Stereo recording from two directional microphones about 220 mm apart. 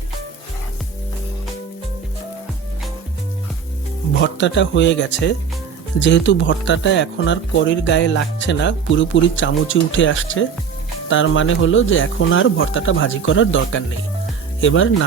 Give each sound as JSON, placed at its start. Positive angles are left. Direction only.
{"t": 4.2, "sound": "speech", "side_deg": 55}